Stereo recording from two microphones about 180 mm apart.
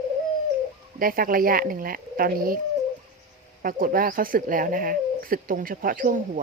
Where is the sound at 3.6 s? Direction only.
50° right (ahead or behind).